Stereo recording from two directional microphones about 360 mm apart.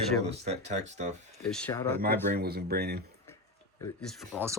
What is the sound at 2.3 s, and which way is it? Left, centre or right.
Speech, right.